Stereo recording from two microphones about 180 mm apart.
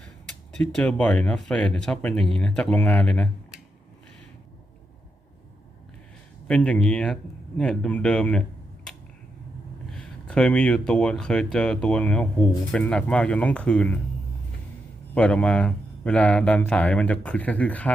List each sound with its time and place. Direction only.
0.6 s speech: 5° left (ahead or behind)
6.5 s speech: 5° left (ahead or behind)
15.1 s speech: 5° left (ahead or behind)